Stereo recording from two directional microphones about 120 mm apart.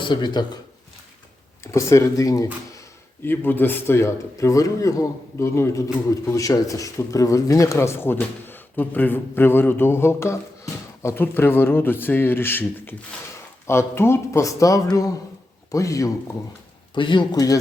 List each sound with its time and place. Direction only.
0.0 s speech: 40° left (ahead or behind)
1.6 s a man's voice: 25° left (ahead or behind)
3.2 s a man's voice: 15° left (ahead or behind)
16.9 s speech: 40° left (ahead or behind)